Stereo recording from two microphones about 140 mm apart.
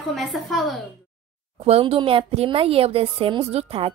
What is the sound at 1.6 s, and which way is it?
A woman's voice, 45° right (ahead or behind).